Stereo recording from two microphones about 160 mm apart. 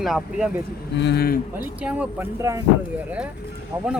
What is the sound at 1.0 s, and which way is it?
Speech, 85° left.